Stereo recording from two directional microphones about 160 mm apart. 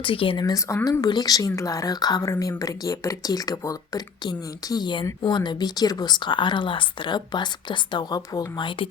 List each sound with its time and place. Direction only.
0.0 s speech: 35° left (ahead or behind)